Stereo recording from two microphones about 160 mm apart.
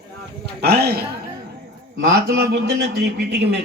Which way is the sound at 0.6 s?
90° right.